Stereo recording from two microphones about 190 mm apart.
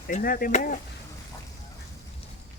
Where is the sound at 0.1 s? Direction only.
45° left (ahead or behind).